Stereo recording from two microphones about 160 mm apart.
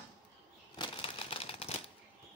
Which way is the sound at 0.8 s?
35° left (ahead or behind).